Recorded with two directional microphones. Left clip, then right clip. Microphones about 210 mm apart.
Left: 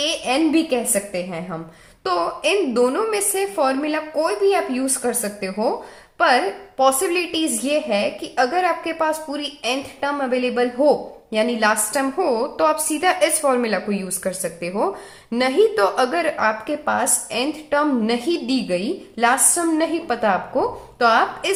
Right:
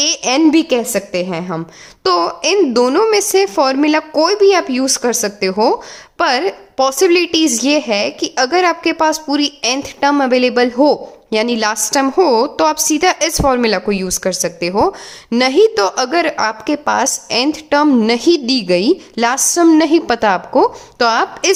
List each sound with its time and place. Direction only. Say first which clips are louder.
0.0 s a woman's voice: right 7 dB; 50° right (ahead or behind)